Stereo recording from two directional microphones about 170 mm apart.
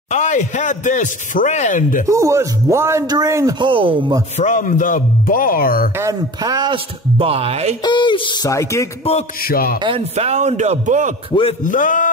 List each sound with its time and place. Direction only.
0.1 s speech: 45° left (ahead or behind)
2.0 s a man's voice: 15° right (ahead or behind)
4.4 s speech: 50° left (ahead or behind)
5.9 s a man's voice: 20° right (ahead or behind); by 7.7 s 35° right (ahead or behind)
7.8 s speech: 25° left (ahead or behind)
9.4 s music: 60° left (ahead or behind)
9.8 s a man's voice: 30° right (ahead or behind)
11.6 s speech: 50° left (ahead or behind)